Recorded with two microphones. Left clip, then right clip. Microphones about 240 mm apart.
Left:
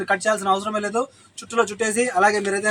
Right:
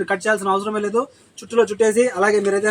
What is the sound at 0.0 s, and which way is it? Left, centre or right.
Speech, centre.